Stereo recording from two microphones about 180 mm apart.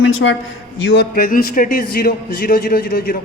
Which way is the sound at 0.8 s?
65° left (ahead or behind).